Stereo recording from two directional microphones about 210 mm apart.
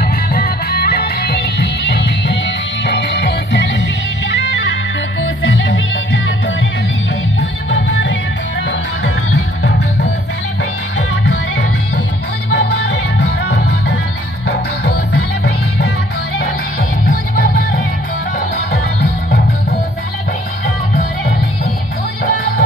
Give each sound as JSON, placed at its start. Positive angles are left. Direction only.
{"t": 0.0, "sound": "music", "side_deg": 50}
{"t": 5.2, "sound": "music", "side_deg": 60}
{"t": 7.7, "sound": "music", "side_deg": 60}
{"t": 12.4, "sound": "music", "side_deg": 55}
{"t": 17.0, "sound": "music", "side_deg": 45}